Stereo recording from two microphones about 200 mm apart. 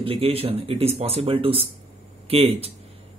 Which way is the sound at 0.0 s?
30° right (ahead or behind).